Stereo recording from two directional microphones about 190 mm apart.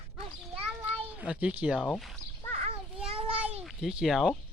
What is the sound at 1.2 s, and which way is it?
Speech, 5° right (ahead or behind).